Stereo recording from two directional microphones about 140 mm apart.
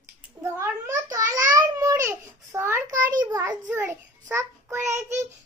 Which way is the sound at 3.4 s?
15° right (ahead or behind).